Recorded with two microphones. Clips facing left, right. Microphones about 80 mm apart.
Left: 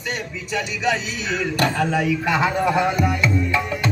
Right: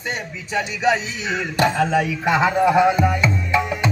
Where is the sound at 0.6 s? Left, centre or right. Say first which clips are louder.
Right 3 dB; right.